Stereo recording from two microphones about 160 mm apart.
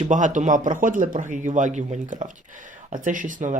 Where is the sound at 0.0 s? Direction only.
50° right (ahead or behind).